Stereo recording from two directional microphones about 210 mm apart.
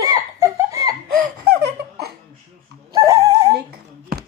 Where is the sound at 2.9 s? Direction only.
20° right (ahead or behind).